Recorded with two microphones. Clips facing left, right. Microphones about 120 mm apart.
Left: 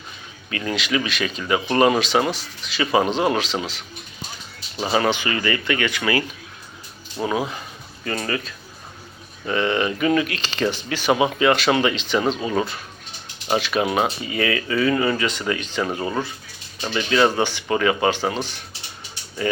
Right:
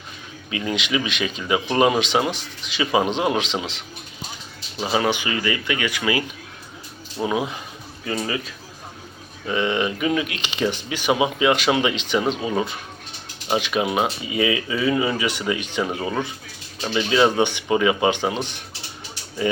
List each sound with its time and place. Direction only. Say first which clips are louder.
0.5 s speech: even; 15° right (ahead or behind)
4.8 s speech: left 1 dB; 5° right (ahead or behind)